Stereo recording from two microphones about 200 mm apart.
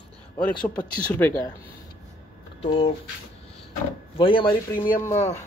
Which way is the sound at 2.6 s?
25° left (ahead or behind).